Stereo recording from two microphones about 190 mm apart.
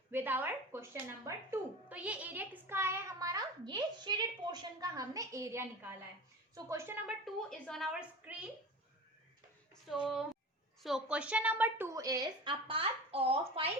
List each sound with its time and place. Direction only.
0.1 s a woman's voice: 10° right (ahead or behind)
9.9 s a woman's voice: 5° right (ahead or behind); by 13.7 s 30° right (ahead or behind)